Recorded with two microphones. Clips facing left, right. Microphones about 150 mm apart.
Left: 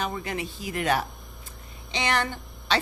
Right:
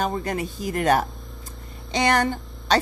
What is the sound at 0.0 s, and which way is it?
Speech, 45° right (ahead or behind).